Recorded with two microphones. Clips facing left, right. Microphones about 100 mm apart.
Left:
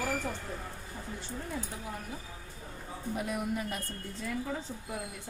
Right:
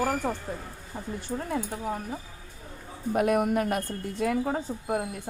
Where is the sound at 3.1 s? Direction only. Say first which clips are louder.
Right 11 dB; 65° right (ahead or behind).